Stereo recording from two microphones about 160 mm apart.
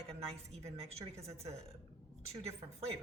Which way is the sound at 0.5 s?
40° right (ahead or behind).